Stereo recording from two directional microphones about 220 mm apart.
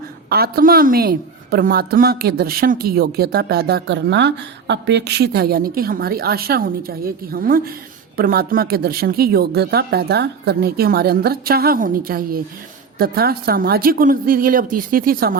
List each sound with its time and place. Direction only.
0.3 s a woman's voice: 45° right (ahead or behind)